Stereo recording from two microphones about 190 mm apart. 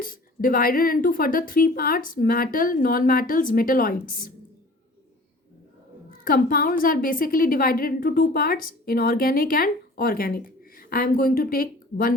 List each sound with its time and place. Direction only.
0.0 s a woman's voice: 50° left (ahead or behind)
6.2 s a woman's voice: 50° left (ahead or behind)